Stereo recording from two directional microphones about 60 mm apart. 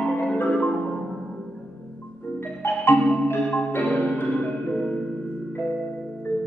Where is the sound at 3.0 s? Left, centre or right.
Centre.